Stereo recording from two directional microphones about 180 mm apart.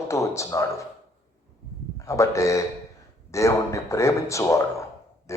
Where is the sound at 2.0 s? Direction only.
15° left (ahead or behind).